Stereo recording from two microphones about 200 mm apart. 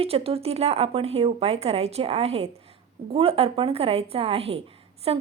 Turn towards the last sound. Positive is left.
turn(degrees=-30)  # may be behind; listen again after turning